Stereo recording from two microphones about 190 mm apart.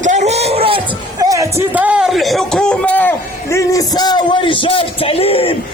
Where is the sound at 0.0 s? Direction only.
40° right (ahead or behind).